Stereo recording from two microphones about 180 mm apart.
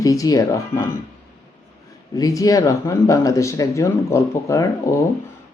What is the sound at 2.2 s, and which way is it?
Speech, 20° left (ahead or behind).